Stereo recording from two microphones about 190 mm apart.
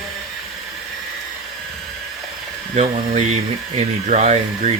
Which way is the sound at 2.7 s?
35° right (ahead or behind).